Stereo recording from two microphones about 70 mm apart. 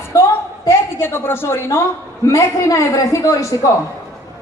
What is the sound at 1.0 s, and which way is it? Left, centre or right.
A woman's voice, left.